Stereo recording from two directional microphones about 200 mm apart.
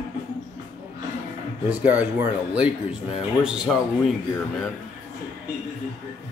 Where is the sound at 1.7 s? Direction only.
5° right (ahead or behind).